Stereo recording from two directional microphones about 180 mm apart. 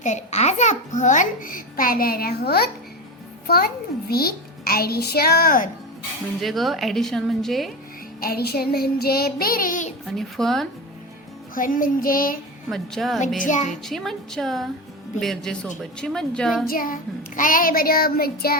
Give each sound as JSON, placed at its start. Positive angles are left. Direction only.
{"t": 0.0, "sound": "a child's voice", "side_deg": 40}
{"t": 4.1, "sound": "child singing", "side_deg": 60}
{"t": 6.4, "sound": "a woman's voice", "side_deg": 0}
{"t": 8.2, "sound": "child singing", "side_deg": 60}
{"t": 10.1, "sound": "a woman's voice", "side_deg": 0}
{"t": 11.5, "sound": "a child's voice", "side_deg": 50}
{"t": 12.7, "sound": "a woman's voice", "side_deg": 0}
{"t": 13.1, "sound": "a child's voice", "side_deg": 45}
{"t": 13.8, "sound": "a woman's voice", "side_deg": 0}
{"t": 16.6, "sound": "a child's voice", "side_deg": 50}